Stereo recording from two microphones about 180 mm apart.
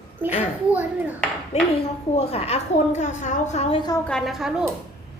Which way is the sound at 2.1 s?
35° left (ahead or behind).